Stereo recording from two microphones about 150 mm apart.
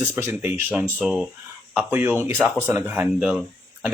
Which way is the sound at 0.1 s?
15° right (ahead or behind).